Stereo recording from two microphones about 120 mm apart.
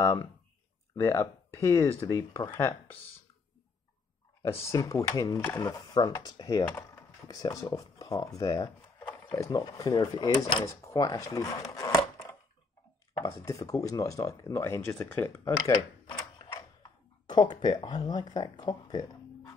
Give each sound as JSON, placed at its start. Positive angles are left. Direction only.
{"t": 0.9, "sound": "speech", "side_deg": 20}
{"t": 4.5, "sound": "speech", "side_deg": 20}
{"t": 13.5, "sound": "speech", "side_deg": 30}
{"t": 15.7, "sound": "a sound", "side_deg": 35}
{"t": 17.3, "sound": "speech", "side_deg": 35}